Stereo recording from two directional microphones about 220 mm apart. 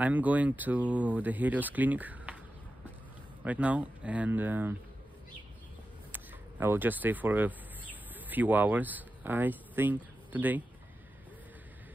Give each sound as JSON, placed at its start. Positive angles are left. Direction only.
{"t": 0.0, "sound": "speech", "side_deg": -5}
{"t": 3.4, "sound": "speech", "side_deg": -5}
{"t": 6.1, "sound": "speech", "side_deg": -10}